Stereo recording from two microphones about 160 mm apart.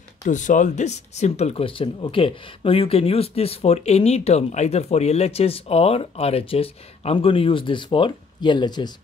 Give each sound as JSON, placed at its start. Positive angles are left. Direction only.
{"t": 0.2, "sound": "speech", "side_deg": 50}